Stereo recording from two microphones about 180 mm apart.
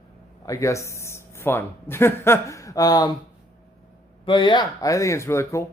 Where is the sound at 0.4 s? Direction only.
15° left (ahead or behind).